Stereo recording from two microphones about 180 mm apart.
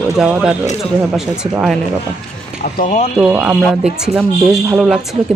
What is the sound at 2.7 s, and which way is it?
Speech, 45° left (ahead or behind).